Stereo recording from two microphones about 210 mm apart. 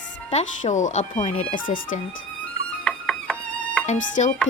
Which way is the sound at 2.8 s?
5° left (ahead or behind).